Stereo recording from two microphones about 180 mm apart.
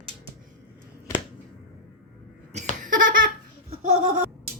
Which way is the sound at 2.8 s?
50° right (ahead or behind).